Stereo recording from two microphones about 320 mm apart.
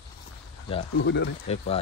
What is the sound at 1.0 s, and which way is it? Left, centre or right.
Speech, left.